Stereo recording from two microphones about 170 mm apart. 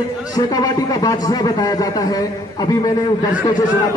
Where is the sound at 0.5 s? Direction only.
20° left (ahead or behind).